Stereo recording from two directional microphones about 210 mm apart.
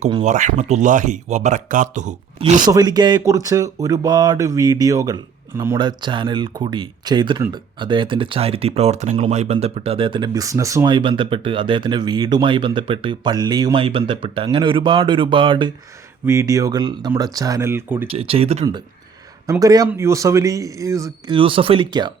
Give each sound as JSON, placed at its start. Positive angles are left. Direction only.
{"t": 0.0, "sound": "speech", "side_deg": -35}
{"t": 2.6, "sound": "speech", "side_deg": -20}
{"t": 18.1, "sound": "speech", "side_deg": -25}
{"t": 19.5, "sound": "speech", "side_deg": -15}